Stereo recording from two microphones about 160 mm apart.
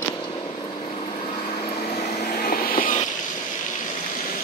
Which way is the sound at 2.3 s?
70° left (ahead or behind).